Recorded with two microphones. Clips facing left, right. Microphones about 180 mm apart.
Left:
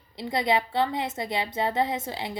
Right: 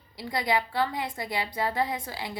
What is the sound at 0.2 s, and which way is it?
A woman's voice, 25° left (ahead or behind).